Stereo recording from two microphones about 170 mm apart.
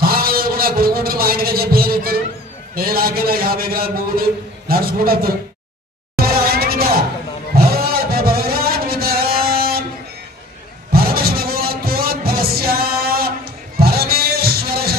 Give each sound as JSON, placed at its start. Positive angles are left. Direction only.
{"t": 0.0, "sound": "music", "side_deg": -60}
{"t": 2.7, "sound": "a man's voice", "side_deg": -60}
{"t": 6.1, "sound": "music", "side_deg": -60}
{"t": 10.9, "sound": "music", "side_deg": -60}